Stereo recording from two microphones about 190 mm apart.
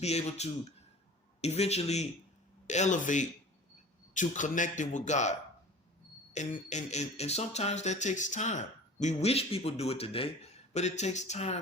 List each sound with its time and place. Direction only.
0.0 s speech: 35° left (ahead or behind)
6.3 s speech: 40° left (ahead or behind)